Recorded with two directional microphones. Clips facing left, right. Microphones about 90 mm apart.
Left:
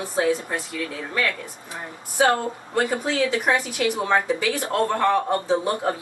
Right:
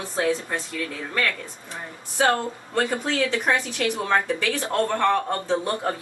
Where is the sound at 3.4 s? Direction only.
15° left (ahead or behind).